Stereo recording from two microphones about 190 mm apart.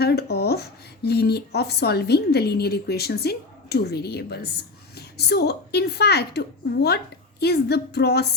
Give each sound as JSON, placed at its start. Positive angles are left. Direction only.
{"t": 0.0, "sound": "a woman's voice", "side_deg": 60}